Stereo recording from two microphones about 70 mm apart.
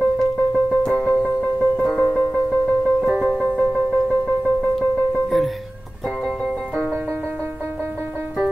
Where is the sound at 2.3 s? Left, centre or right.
Centre.